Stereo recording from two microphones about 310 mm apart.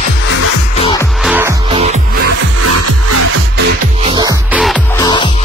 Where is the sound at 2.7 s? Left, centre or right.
Right.